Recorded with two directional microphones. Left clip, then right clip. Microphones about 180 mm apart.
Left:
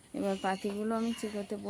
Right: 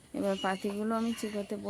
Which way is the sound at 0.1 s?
15° right (ahead or behind).